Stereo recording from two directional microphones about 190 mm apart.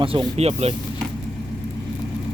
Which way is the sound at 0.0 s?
30° right (ahead or behind).